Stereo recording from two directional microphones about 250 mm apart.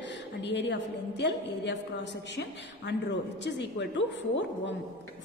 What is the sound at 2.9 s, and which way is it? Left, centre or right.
A woman's voice, left.